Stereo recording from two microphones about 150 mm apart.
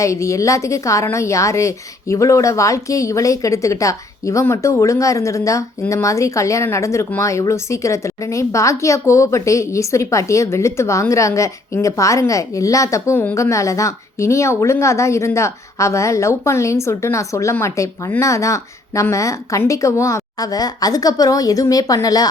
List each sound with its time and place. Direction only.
0.0 s a woman's voice: 20° left (ahead or behind)